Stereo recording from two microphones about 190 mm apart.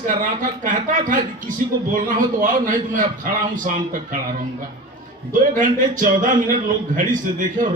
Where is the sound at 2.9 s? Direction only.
45° right (ahead or behind).